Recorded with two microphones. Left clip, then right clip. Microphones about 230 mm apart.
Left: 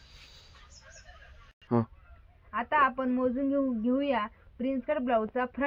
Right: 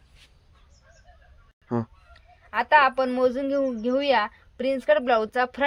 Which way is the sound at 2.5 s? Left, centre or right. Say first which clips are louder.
Right 7 dB; right.